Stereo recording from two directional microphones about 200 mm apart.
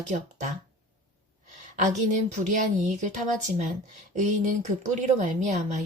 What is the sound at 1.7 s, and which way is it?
A woman's voice, 35° right (ahead or behind).